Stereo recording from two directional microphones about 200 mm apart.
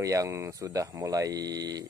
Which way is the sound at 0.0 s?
15° right (ahead or behind).